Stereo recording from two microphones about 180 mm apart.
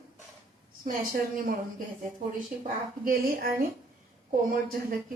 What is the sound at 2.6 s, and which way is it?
Speech, 55° right (ahead or behind).